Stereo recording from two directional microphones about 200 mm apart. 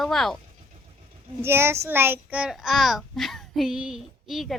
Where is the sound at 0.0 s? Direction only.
Centre (ahead or behind).